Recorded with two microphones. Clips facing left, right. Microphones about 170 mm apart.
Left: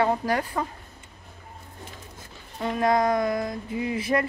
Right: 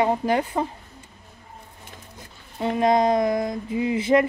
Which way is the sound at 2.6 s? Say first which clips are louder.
Right 3 dB; 25° right (ahead or behind).